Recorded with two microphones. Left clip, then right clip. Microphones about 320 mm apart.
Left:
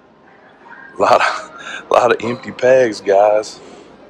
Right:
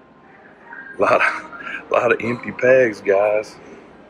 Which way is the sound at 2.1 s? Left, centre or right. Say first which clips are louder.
Left 2 dB; left.